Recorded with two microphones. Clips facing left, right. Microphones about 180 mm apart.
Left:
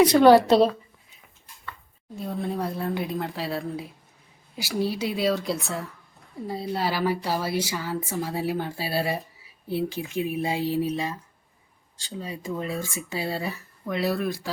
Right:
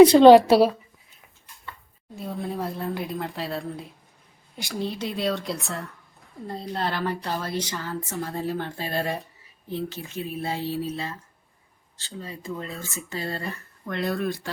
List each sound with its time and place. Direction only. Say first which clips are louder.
0.0 s a woman's voice: right 4 dB; 25° right (ahead or behind)
0.4 s a woman's voice: right 1 dB; 5° right (ahead or behind)
2.1 s speech: left 1 dB; centre (ahead or behind)